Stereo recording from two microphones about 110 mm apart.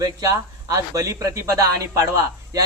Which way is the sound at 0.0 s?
30° right (ahead or behind).